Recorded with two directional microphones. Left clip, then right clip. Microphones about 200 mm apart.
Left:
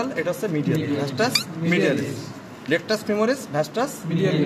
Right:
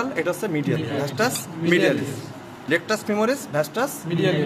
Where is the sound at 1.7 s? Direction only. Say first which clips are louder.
Right 2 dB; 35° right (ahead or behind).